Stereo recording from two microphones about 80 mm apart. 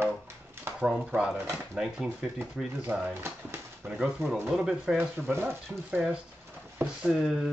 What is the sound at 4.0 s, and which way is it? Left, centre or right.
Speech, centre.